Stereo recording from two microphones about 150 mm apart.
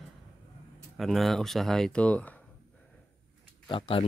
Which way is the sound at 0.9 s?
Centre (ahead or behind).